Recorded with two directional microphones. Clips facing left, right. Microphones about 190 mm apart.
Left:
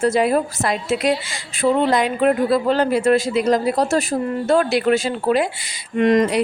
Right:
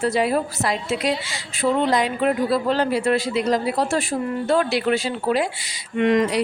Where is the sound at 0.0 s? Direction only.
45° left (ahead or behind).